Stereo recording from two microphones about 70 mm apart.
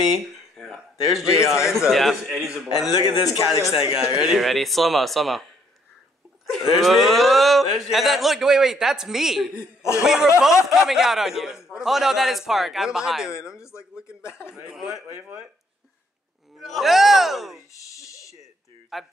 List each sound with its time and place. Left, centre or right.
0.1 s a man's voice: centre
4.4 s a man's voice: centre
6.6 s a man's voice: centre
9.6 s speech: left
10.0 s a man's voice: centre
14.0 s speech: left
14.5 s a man's voice: centre
16.5 s a man's voice: centre
17.9 s a sound: left
18.9 s a man's voice: centre